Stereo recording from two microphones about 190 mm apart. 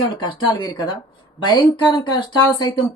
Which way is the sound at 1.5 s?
25° left (ahead or behind).